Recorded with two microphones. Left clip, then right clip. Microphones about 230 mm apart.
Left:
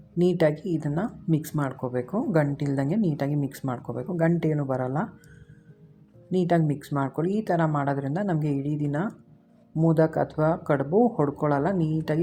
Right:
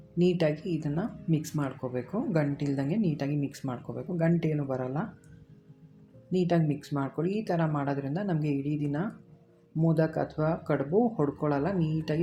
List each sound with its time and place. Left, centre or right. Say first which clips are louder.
0.2 s speech: left 4 dB; left
6.3 s speech: left 4 dB; left